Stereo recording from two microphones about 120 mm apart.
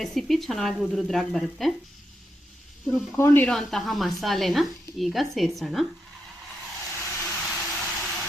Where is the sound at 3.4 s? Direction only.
Centre (ahead or behind).